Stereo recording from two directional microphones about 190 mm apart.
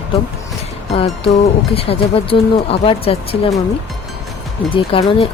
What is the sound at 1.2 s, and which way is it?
Speech, 30° left (ahead or behind).